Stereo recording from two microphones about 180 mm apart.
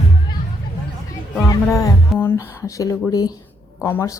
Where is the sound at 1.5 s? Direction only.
20° left (ahead or behind).